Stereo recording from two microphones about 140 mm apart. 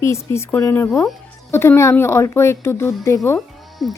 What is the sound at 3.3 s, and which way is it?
Music, centre (ahead or behind).